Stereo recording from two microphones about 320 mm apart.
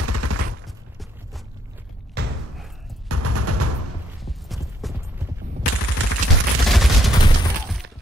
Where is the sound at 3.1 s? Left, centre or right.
Right.